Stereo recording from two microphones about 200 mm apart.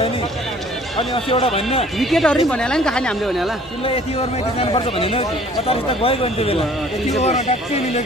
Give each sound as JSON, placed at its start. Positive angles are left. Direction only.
{"t": 0.9, "sound": "a man's voice", "side_deg": 30}
{"t": 2.0, "sound": "speech", "side_deg": 0}
{"t": 3.8, "sound": "a man's voice", "side_deg": 30}